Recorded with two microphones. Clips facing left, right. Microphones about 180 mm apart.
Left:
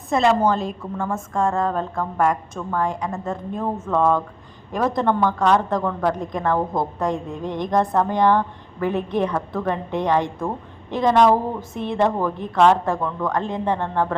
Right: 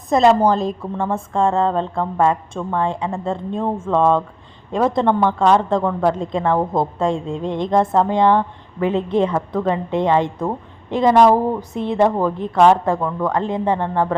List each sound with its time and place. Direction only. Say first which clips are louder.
0.1 s a woman's voice: right 4 dB; 35° right (ahead or behind); by 10.5 s 20° right (ahead or behind)
11.0 s a woman's voice: right 3 dB; 10° right (ahead or behind)